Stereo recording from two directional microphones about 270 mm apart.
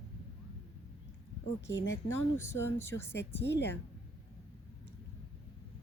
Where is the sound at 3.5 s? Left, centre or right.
Left.